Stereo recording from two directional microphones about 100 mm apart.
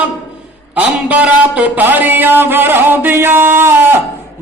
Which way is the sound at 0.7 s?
15° right (ahead or behind).